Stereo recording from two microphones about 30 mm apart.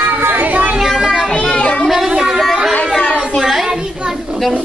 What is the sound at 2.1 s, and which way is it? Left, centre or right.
Chatter, centre.